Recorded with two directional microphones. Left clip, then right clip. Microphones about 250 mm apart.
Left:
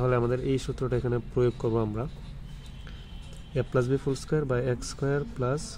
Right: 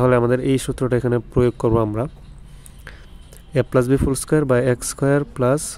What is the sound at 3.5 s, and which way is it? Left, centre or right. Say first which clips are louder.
Speech: right 10 dB; right.